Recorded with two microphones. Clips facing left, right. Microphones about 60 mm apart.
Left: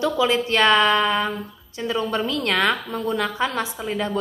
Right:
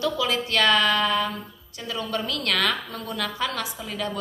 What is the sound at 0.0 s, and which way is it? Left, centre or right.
A woman's voice, left.